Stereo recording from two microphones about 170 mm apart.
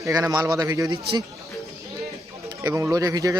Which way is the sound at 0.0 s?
20° right (ahead or behind).